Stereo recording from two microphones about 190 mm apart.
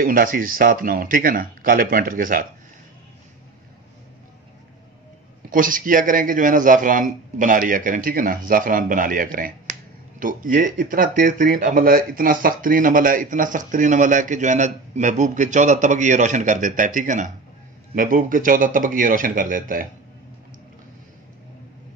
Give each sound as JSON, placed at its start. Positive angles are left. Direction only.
{"t": 0.0, "sound": "a man's voice", "side_deg": -50}
{"t": 5.5, "sound": "a man's voice", "side_deg": -45}